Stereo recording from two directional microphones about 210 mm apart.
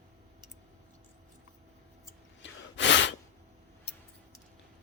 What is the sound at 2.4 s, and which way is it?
Gasp, 60° left (ahead or behind).